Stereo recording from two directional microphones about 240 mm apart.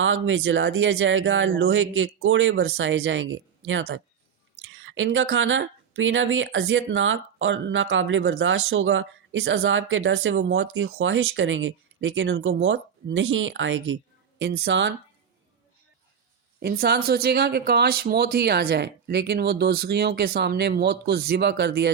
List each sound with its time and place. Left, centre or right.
0.0 s speech: right
16.6 s speech: right